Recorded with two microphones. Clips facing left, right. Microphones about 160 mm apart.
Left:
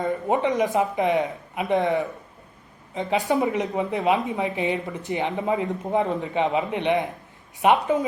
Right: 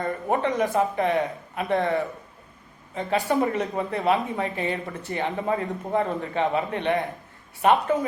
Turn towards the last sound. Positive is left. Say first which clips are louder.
# left 1 dB
turn(degrees=15)  # may be behind; listen again after turning